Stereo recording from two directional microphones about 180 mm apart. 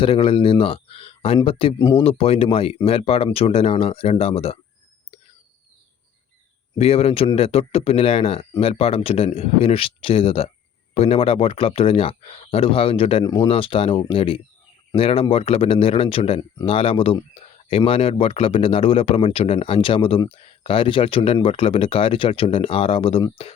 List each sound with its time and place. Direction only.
0.0 s speech: 30° left (ahead or behind)
1.8 s speech: 15° left (ahead or behind)
2.0 s speech: 30° left (ahead or behind)
6.7 s speech: 35° left (ahead or behind)